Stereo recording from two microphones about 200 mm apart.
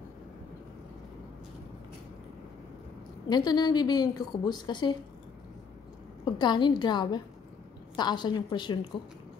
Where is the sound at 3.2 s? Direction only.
20° left (ahead or behind).